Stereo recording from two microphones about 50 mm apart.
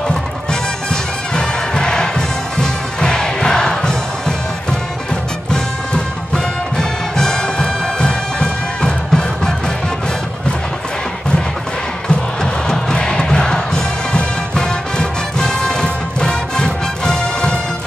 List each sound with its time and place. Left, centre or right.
0.1 s music: centre
5.5 s music: centre
12.1 s music: centre